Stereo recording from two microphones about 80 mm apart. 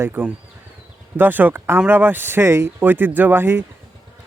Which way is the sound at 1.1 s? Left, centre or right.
Right.